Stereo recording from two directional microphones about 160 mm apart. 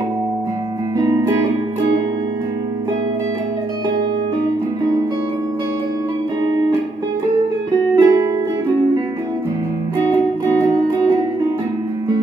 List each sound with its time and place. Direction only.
0.9 s music: 20° right (ahead or behind)
6.4 s music: 25° right (ahead or behind)
7.9 s music: 25° right (ahead or behind)